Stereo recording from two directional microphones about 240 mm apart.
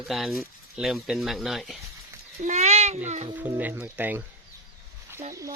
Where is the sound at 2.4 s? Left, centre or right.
Right.